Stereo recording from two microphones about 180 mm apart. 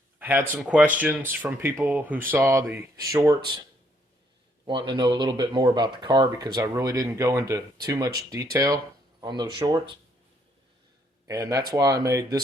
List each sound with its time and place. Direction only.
0.2 s speech: 10° right (ahead or behind)
4.6 s speech: 25° right (ahead or behind)
11.3 s speech: 20° right (ahead or behind)